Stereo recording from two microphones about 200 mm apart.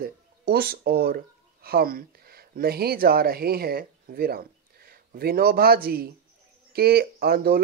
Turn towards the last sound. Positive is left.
turn(degrees=-50)  # may be behind; listen again after turning